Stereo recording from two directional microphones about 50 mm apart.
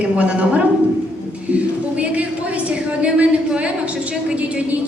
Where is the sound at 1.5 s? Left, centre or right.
Right.